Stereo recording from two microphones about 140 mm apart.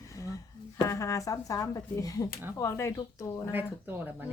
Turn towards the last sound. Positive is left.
turn(degrees=-15)  # may be behind; listen again after turning